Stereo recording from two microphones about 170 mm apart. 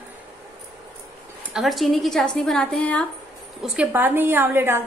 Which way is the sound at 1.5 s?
Centre (ahead or behind).